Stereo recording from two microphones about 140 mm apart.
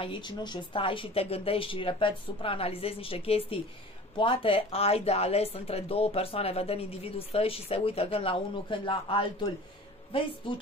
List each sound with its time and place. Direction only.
0.0 s speech: 35° left (ahead or behind)